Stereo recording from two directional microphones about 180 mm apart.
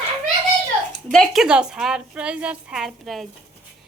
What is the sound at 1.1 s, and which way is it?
A woman's voice, centre (ahead or behind).